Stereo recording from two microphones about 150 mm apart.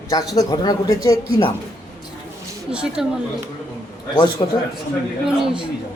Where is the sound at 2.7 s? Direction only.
5° right (ahead or behind).